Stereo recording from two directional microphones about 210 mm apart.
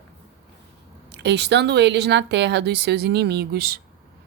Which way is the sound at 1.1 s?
55° right (ahead or behind).